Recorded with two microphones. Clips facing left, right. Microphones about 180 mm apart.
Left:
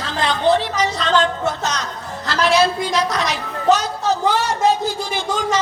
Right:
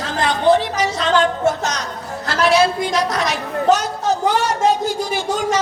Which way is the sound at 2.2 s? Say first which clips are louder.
Right 1 dB; 50° right (ahead or behind).